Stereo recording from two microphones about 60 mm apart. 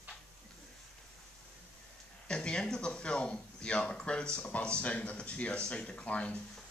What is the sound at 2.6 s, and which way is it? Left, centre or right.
Speech, centre.